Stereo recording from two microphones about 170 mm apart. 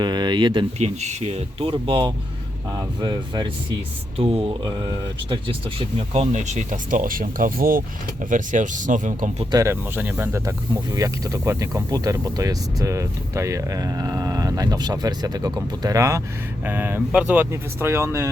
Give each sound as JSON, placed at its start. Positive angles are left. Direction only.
{"t": 0.0, "sound": "speech", "side_deg": -25}
{"t": 0.8, "sound": "speech", "side_deg": -40}
{"t": 6.0, "sound": "speech", "side_deg": -40}
{"t": 9.5, "sound": "speech", "side_deg": -20}